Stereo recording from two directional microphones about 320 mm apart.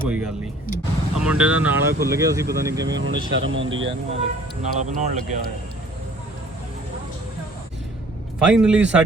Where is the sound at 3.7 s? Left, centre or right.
Right.